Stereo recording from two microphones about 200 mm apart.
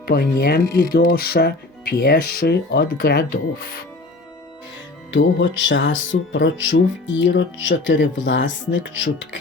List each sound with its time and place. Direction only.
0.1 s speech: 50° left (ahead or behind)
5.1 s speech: 65° left (ahead or behind)